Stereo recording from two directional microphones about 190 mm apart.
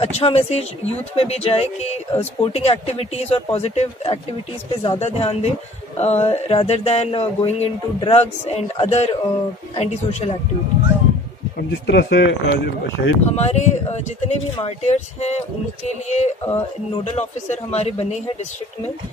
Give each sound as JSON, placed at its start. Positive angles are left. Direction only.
{"t": 0.0, "sound": "speech", "side_deg": 35}
{"t": 11.7, "sound": "speech", "side_deg": 60}
{"t": 13.3, "sound": "speech", "side_deg": 35}